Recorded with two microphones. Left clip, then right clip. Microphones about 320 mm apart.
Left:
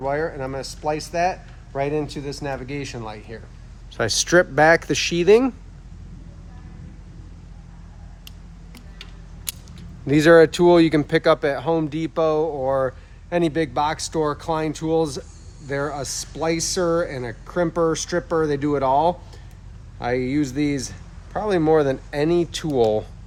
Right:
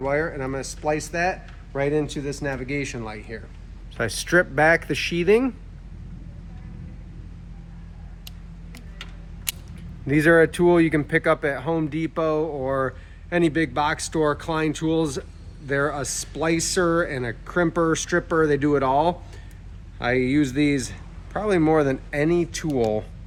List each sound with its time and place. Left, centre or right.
0.0 s speech: centre
3.9 s speech: left
10.1 s speech: left